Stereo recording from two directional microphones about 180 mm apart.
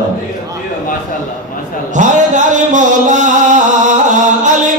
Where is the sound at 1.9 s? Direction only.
45° right (ahead or behind).